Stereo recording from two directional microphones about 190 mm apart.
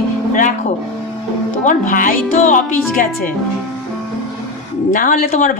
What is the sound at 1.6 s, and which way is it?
Speech, 45° left (ahead or behind).